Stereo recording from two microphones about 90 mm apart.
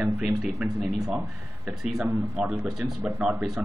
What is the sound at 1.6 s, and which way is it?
Speech, 10° right (ahead or behind).